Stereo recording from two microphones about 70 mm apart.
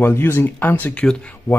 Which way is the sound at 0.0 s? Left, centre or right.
Left.